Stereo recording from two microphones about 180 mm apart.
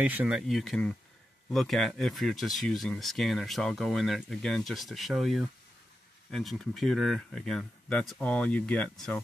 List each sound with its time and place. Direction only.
0.0 s speech: 10° right (ahead or behind)